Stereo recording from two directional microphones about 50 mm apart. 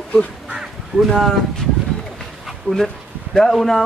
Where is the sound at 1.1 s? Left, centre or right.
Centre.